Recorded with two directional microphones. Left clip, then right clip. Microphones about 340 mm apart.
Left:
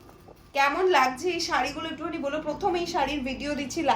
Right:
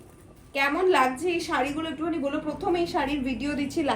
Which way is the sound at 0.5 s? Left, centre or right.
Centre.